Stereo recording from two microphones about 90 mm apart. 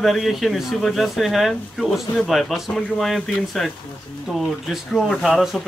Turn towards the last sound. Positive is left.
turn(degrees=0)  # may be behind; listen again after turning